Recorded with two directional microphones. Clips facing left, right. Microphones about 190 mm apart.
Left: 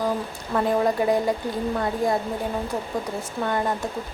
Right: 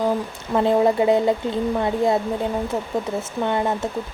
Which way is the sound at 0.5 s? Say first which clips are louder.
Right 4 dB; 25° right (ahead or behind).